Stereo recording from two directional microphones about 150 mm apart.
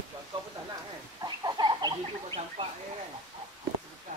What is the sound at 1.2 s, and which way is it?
Chicken, 30° right (ahead or behind).